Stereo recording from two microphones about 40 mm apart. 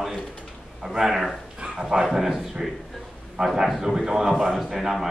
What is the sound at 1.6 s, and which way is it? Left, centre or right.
Speech, right.